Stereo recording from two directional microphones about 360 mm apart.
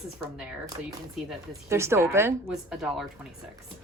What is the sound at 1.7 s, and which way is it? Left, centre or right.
Speech, centre.